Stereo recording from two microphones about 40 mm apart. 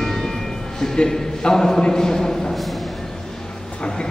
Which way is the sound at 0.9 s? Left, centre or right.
Centre.